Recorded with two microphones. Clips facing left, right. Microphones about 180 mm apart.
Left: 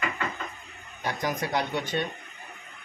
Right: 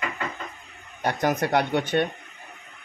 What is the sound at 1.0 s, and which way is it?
Speech, 60° right (ahead or behind).